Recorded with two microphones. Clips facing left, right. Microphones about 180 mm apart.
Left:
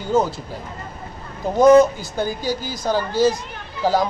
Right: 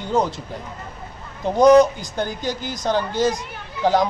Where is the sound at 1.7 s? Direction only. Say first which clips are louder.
Left 1 dB; 15° right (ahead or behind).